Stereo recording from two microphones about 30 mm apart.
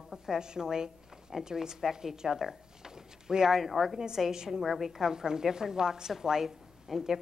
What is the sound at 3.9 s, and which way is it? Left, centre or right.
Speech, centre.